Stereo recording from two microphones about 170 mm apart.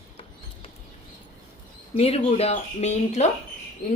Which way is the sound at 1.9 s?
35° left (ahead or behind).